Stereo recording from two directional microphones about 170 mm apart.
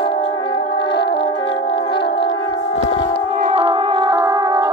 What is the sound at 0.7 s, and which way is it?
Music, 90° left.